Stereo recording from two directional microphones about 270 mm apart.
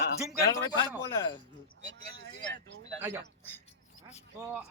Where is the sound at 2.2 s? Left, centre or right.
Right.